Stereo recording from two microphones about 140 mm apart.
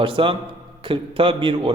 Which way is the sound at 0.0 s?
40° right (ahead or behind).